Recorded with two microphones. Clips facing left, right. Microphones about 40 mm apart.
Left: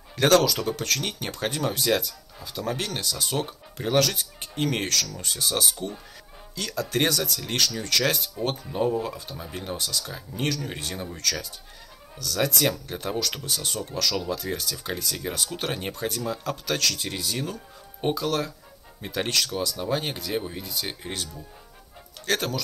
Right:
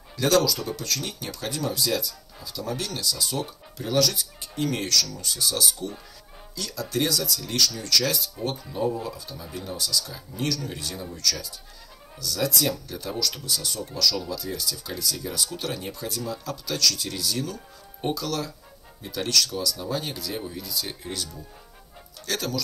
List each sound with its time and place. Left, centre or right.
0.2 s speech: left